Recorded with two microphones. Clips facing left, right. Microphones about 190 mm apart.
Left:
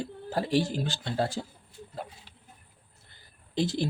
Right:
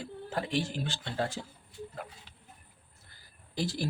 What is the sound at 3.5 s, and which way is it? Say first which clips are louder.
Speech: left 5 dB; 25° left (ahead or behind).